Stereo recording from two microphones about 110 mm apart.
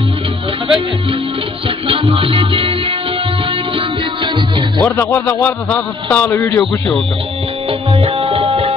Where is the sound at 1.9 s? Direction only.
55° right (ahead or behind).